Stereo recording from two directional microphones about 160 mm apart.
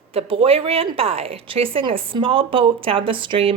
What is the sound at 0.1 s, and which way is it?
A woman's voice, 35° right (ahead or behind).